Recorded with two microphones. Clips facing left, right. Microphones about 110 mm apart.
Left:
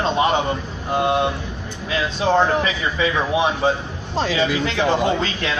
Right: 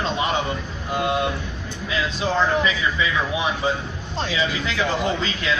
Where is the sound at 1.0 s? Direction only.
25° left (ahead or behind).